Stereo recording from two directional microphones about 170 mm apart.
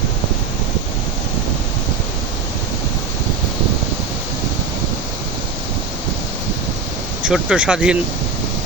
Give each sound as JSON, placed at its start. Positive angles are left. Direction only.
{"t": 7.3, "sound": "speech", "side_deg": -5}